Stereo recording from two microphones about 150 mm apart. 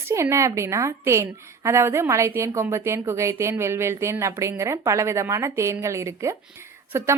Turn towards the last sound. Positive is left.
turn(degrees=-15)  # may be behind; listen again after turning